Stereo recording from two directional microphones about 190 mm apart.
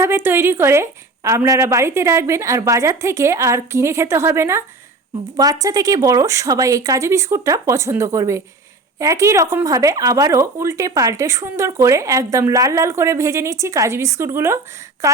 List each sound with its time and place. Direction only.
0.0 s speech: 10° right (ahead or behind)